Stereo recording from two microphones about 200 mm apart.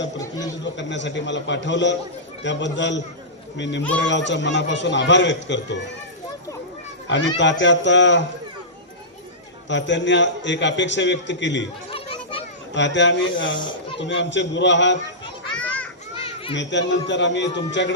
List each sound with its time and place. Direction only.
0.6 s a man's voice: 65° left (ahead or behind)
7.1 s a man's voice: 65° left (ahead or behind)
9.6 s a man's voice: 65° left (ahead or behind)
11.9 s children playing: 25° left (ahead or behind)
12.7 s a man's voice: 65° left (ahead or behind)
15.5 s children playing: 5° left (ahead or behind)
16.1 s children playing: 30° left (ahead or behind)
16.6 s a man's voice: 60° left (ahead or behind)